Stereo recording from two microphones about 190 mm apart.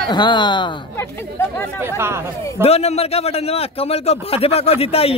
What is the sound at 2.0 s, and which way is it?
Speech, 15° right (ahead or behind).